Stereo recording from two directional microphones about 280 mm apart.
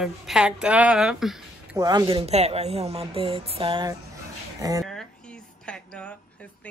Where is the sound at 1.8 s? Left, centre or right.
Centre.